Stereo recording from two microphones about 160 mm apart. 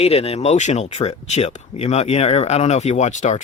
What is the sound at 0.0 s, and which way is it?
Speech, 40° left (ahead or behind).